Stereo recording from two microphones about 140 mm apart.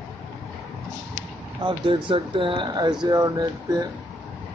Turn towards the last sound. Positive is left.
turn(degrees=-30)  # may be behind; listen again after turning